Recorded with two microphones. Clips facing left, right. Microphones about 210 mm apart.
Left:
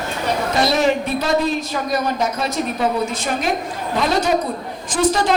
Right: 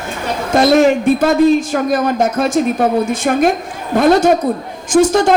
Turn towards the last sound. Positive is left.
turn(degrees=-45)  # may be behind; listen again after turning